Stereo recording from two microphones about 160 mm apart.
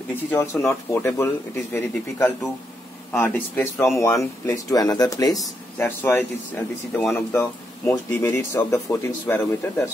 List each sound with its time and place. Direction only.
0.1 s speech: 15° left (ahead or behind)